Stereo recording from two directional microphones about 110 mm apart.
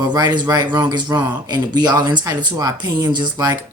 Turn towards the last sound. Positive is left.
turn(degrees=-40)  # may be behind; listen again after turning